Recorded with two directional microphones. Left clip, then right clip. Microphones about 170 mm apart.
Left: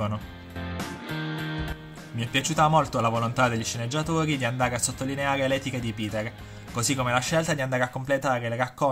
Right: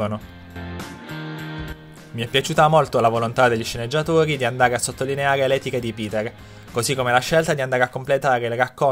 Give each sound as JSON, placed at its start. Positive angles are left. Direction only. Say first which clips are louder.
{"t": 0.6, "sound": "music", "louder": "right 1 dB", "side_deg": -30}
{"t": 2.1, "sound": "speech", "louder": "right 6 dB", "side_deg": -55}